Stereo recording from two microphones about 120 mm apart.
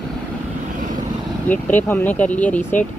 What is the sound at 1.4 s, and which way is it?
Speech, 15° left (ahead or behind).